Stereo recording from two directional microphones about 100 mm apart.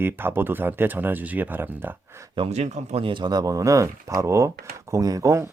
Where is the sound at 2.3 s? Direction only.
80° right.